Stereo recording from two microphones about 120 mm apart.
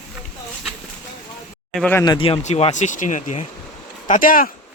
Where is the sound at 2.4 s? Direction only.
70° left (ahead or behind); by 4.2 s 90° left.